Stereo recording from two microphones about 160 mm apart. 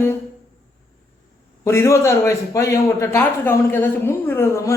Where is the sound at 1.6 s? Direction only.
20° left (ahead or behind).